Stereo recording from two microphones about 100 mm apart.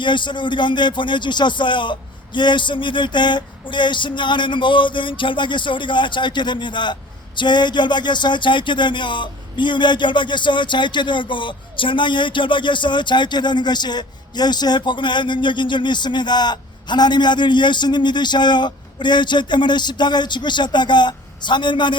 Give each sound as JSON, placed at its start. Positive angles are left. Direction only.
{"t": 0.0, "sound": "speech", "side_deg": 50}